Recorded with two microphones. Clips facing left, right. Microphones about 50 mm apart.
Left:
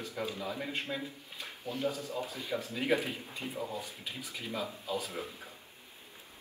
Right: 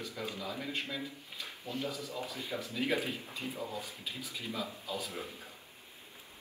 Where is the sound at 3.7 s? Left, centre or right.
Left.